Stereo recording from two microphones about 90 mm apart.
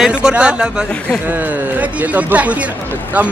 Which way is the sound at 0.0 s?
10° right (ahead or behind).